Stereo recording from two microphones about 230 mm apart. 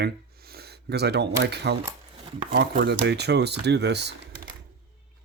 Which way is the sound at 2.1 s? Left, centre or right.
Right.